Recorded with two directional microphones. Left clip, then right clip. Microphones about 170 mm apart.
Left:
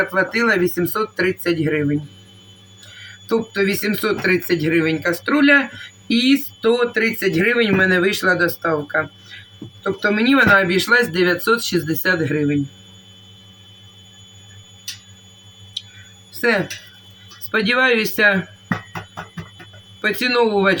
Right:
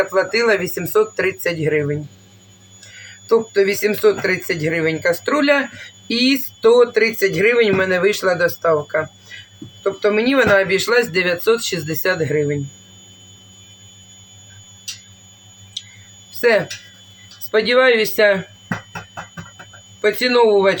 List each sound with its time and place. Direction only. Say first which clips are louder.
0.1 s speech: right 2 dB; 15° right (ahead or behind)
3.2 s speech: right 4 dB; 15° right (ahead or behind)
17.5 s speech: right 3 dB; 10° right (ahead or behind)
20.0 s speech: right 3 dB; 10° right (ahead or behind)